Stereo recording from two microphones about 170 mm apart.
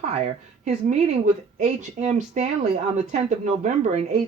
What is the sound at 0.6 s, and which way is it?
A woman's voice, 40° right (ahead or behind).